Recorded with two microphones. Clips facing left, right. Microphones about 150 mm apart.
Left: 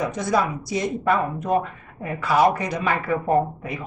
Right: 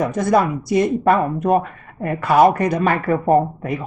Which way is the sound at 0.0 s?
55° right (ahead or behind).